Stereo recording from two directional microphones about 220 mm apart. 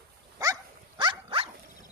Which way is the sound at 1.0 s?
20° right (ahead or behind).